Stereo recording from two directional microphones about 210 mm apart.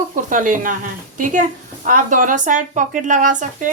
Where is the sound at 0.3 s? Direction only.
40° right (ahead or behind).